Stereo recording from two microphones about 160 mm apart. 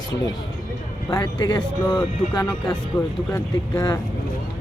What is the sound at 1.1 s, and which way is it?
Speech, 20° left (ahead or behind).